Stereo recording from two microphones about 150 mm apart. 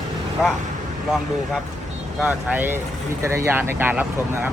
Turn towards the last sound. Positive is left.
turn(degrees=-10)  # may be behind; listen again after turning